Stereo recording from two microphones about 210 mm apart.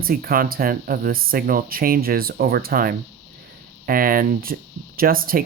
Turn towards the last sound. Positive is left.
turn(degrees=-45)  # may be behind; listen again after turning